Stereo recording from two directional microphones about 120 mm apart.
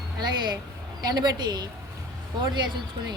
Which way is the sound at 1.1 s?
35° right (ahead or behind).